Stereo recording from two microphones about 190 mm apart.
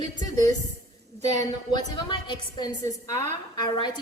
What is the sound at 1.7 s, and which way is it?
A woman's voice, 25° left (ahead or behind).